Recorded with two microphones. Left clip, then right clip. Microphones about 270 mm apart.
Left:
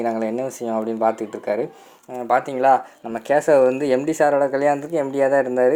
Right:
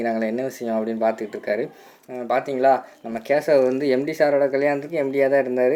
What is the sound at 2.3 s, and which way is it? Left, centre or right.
Speech, left.